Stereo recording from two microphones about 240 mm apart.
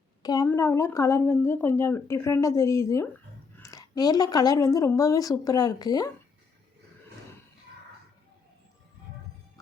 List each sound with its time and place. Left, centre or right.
0.2 s speech: centre